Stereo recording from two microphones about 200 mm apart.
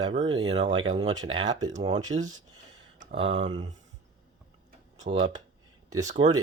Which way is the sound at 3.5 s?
20° right (ahead or behind).